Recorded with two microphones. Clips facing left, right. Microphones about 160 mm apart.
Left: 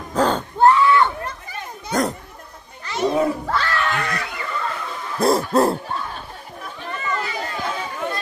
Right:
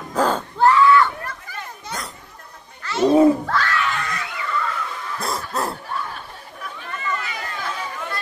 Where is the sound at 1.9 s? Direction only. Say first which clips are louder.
Left 13 dB; 45° left (ahead or behind).